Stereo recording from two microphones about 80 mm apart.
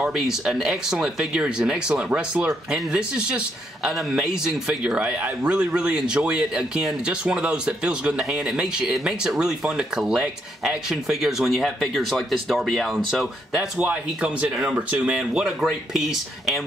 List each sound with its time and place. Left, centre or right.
0.0 s speech: centre
13.7 s speech: centre